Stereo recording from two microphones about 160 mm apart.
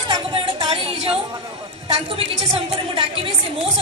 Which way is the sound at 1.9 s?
35° right (ahead or behind).